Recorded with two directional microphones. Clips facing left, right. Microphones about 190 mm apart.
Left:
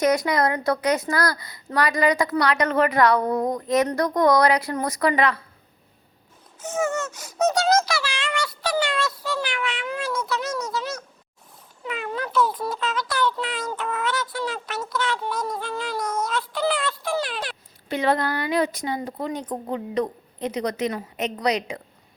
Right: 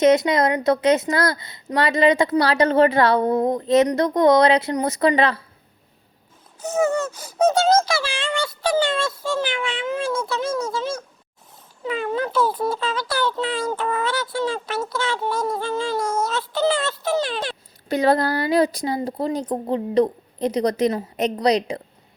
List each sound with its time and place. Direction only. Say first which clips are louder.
0.0 s a child's voice: right 4 dB; 25° right (ahead or behind)
6.6 s a child's voice: right 5 dB; 35° right (ahead or behind)
17.8 s speech: right 4 dB; 40° right (ahead or behind)